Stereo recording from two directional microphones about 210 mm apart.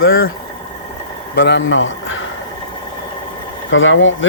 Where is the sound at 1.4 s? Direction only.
60° left (ahead or behind).